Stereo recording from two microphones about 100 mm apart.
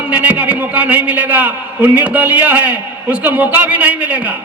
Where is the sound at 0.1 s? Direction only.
15° right (ahead or behind).